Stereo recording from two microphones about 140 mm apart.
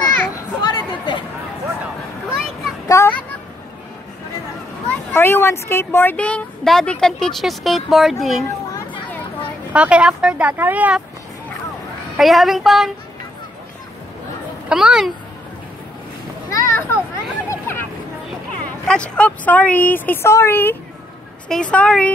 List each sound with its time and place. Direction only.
0.3 s a sound: 30° left (ahead or behind)
2.9 s a sound: 15° left (ahead or behind)
5.1 s speech: 15° left (ahead or behind); by 8.5 s centre (ahead or behind)
9.7 s speech: 10° right (ahead or behind)
12.2 s speech: centre (ahead or behind)
14.7 s speech: 5° right (ahead or behind)
16.4 s children playing: 20° left (ahead or behind)
17.5 s a sound: 15° left (ahead or behind)
18.9 s a woman's voice: 10° left (ahead or behind)